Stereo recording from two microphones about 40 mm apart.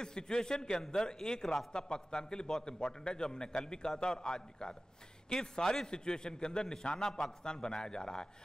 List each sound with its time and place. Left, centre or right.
0.0 s a man's voice: left